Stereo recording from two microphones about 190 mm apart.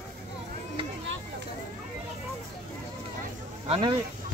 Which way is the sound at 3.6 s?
35° right (ahead or behind).